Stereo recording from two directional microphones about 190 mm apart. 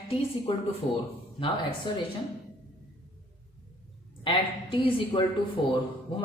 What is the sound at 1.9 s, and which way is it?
Speech, 25° left (ahead or behind).